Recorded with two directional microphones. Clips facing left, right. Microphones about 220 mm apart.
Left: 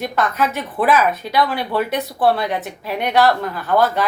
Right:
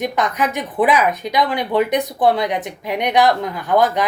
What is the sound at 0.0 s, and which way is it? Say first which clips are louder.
Speech: even; 15° right (ahead or behind).